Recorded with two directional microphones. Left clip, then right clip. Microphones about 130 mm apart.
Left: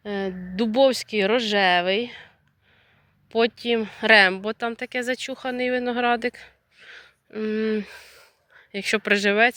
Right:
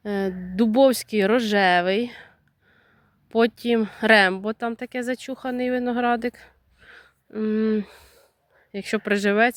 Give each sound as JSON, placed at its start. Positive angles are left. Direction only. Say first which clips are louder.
{"t": 0.0, "sound": "speech", "louder": "right 2 dB", "side_deg": -65}
{"t": 8.7, "sound": "speech", "louder": "left 3 dB", "side_deg": -35}